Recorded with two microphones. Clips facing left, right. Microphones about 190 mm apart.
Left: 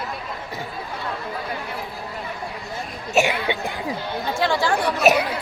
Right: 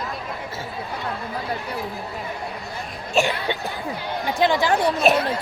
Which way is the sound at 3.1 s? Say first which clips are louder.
Left 1 dB; 10° left (ahead or behind).